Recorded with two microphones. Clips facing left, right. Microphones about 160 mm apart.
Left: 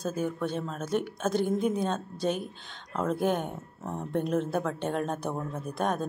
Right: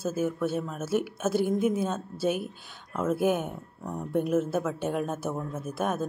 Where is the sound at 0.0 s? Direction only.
5° right (ahead or behind).